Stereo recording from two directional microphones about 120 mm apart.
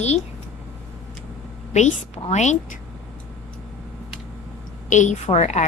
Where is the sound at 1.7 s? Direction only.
75° left (ahead or behind).